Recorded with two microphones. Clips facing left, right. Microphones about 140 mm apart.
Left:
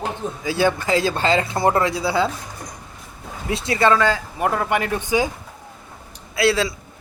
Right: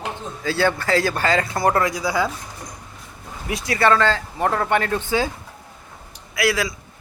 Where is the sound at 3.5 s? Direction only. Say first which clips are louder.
Left 1 dB; 25° left (ahead or behind).